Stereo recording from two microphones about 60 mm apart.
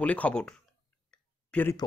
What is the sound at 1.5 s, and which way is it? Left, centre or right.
Speech, centre.